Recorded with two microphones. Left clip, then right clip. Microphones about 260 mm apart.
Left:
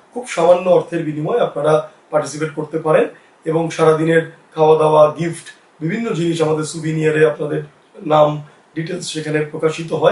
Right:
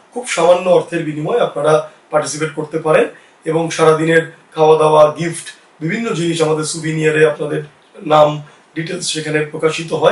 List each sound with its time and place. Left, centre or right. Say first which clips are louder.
0.2 s speech: right 1 dB; centre
4.8 s a sound: right 2 dB; left
5.1 s speech: right 2 dB; centre